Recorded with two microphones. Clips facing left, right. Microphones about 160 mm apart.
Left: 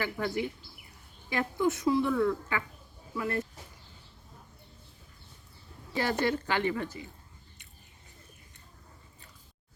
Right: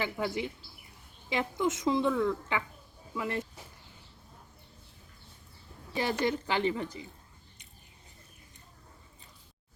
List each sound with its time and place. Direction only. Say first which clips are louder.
0.0 s a woman's voice: left 1 dB; 20° right (ahead or behind)
5.9 s a woman's voice: left 1 dB; 20° right (ahead or behind)